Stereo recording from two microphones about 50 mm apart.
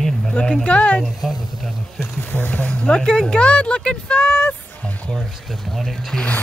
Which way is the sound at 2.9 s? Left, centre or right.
Centre.